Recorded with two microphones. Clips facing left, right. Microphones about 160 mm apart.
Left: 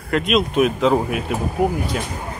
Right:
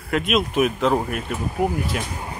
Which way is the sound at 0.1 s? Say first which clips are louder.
Left 3 dB; centre (ahead or behind).